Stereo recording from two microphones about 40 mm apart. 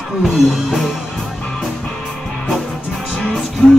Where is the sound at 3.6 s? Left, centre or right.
Left.